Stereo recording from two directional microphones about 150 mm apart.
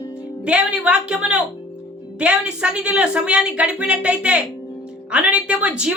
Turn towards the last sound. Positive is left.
turn(degrees=-5)  # may be behind; listen again after turning